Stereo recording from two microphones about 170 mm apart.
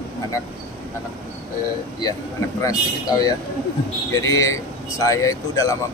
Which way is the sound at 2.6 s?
20° left (ahead or behind).